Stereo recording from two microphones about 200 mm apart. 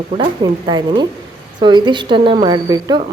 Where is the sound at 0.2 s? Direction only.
20° right (ahead or behind).